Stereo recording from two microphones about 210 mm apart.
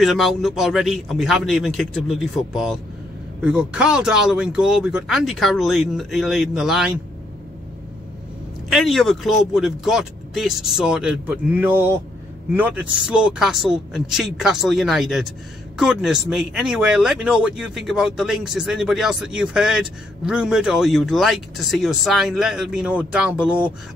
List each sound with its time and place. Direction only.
0.0 s speech: centre (ahead or behind)
8.6 s speech: centre (ahead or behind)